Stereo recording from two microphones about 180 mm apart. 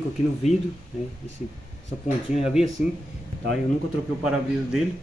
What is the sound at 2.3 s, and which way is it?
Speech, 5° right (ahead or behind).